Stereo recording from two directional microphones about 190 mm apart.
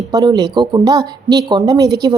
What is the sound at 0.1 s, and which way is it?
A woman's voice, 20° right (ahead or behind).